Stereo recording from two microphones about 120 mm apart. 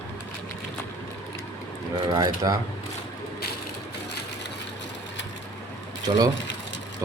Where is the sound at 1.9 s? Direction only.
35° right (ahead or behind).